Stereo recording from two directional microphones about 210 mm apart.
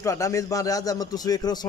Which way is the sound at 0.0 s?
15° left (ahead or behind).